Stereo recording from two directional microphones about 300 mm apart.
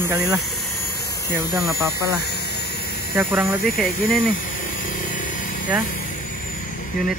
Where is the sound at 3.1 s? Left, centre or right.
Centre.